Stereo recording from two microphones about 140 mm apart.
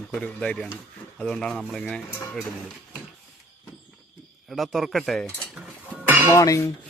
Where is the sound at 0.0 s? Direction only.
10° left (ahead or behind).